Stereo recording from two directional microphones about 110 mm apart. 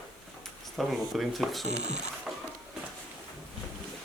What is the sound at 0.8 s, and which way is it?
Speech, centre (ahead or behind).